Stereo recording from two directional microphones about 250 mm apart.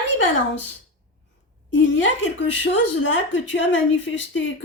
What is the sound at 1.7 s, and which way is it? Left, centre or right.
A woman's voice, left.